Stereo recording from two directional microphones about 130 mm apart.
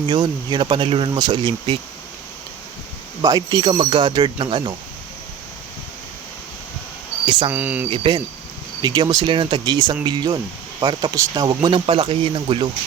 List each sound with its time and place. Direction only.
0.1 s speech: 35° right (ahead or behind)
3.2 s speech: 30° right (ahead or behind)
7.3 s speech: 40° right (ahead or behind)
7.5 s speech: 15° right (ahead or behind)
7.9 s speech: 40° right (ahead or behind)